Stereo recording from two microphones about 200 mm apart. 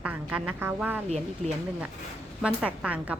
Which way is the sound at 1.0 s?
35° right (ahead or behind).